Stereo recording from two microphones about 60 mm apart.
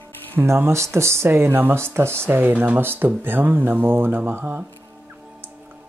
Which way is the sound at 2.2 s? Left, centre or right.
Right.